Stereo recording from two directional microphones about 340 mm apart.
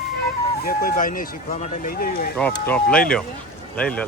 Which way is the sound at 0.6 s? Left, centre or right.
Left.